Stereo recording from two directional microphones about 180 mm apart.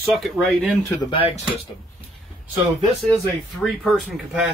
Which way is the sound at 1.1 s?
30° left (ahead or behind).